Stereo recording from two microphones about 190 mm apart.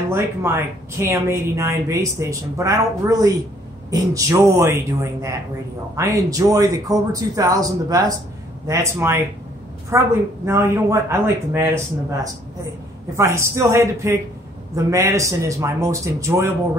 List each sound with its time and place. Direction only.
0.1 s a woman's voice: 15° right (ahead or behind)
5.9 s a woman's voice: 15° right (ahead or behind)